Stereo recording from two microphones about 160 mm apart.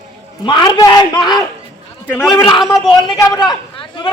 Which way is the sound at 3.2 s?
25° left (ahead or behind).